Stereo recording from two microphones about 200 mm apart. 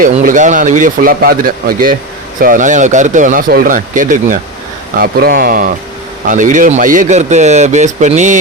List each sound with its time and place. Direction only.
0.0 s a man's voice: 40° right (ahead or behind)